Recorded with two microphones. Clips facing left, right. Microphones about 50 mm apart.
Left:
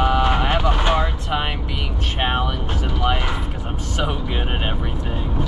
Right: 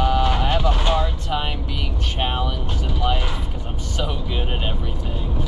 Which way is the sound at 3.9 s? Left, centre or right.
Left.